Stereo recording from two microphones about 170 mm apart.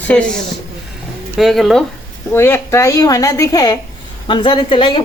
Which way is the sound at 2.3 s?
15° left (ahead or behind).